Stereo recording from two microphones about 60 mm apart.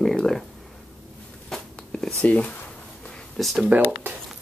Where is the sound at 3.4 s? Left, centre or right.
Centre.